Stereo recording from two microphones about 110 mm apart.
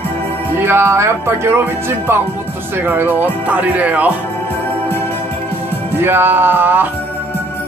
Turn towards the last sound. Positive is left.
turn(degrees=-15)  # may be behind; listen again after turning